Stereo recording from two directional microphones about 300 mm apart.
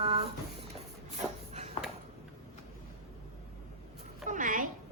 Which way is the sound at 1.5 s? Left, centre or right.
Right.